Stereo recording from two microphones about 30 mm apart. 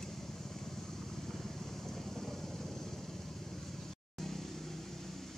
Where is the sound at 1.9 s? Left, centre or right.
Centre.